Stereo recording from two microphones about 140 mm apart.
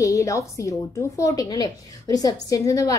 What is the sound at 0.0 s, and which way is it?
A woman's voice, 25° left (ahead or behind).